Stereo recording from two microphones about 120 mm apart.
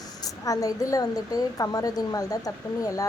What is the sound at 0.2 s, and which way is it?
A woman's voice, 30° left (ahead or behind).